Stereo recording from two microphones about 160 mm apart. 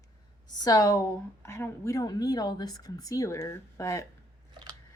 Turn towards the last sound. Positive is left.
turn(degrees=20)  # may be behind; listen again after turning